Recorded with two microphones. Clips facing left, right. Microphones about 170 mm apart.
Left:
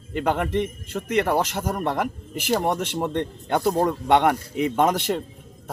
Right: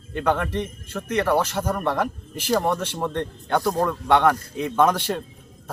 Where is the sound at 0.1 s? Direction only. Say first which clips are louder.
Even; 15° left (ahead or behind).